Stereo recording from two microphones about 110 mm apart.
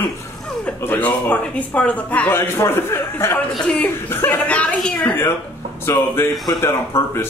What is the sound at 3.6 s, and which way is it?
Speech, 5° left (ahead or behind).